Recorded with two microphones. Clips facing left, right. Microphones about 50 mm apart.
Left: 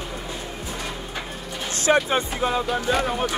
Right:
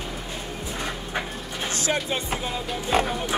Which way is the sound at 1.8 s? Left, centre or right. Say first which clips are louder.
Left 8 dB; left.